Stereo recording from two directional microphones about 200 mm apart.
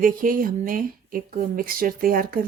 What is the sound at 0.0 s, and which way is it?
Speech, 45° right (ahead or behind).